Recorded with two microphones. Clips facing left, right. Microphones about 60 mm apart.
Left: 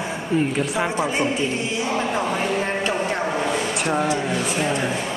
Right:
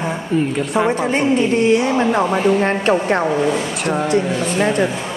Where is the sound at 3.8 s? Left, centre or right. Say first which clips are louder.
Right 6 dB; centre.